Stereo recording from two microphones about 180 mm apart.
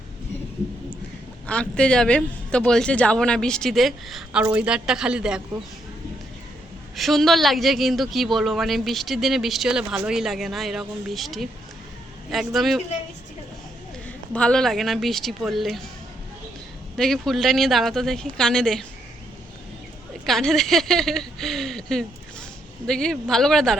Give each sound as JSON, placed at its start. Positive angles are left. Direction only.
{"t": 1.5, "sound": "speech", "side_deg": 5}
{"t": 6.9, "sound": "speech", "side_deg": 0}
{"t": 14.3, "sound": "speech", "side_deg": 5}
{"t": 17.0, "sound": "speech", "side_deg": 0}
{"t": 20.2, "sound": "speech", "side_deg": 0}